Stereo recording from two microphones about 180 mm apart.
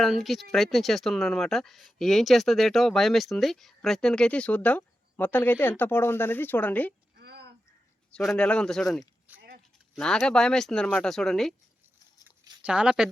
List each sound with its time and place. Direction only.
0.0 s speech: centre (ahead or behind)
7.2 s a sound: 65° right (ahead or behind)
8.1 s speech: 5° left (ahead or behind)
12.6 s speech: 5° right (ahead or behind)